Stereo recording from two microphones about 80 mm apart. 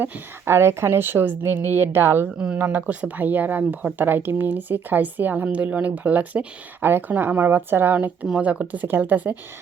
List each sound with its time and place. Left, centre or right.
0.0 s speech: right
2.4 s speech: centre